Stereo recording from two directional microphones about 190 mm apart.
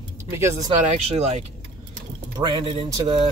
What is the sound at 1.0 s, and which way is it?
Speech, 35° right (ahead or behind).